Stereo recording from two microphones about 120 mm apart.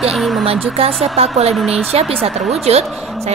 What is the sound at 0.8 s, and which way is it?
Speech, 60° right (ahead or behind).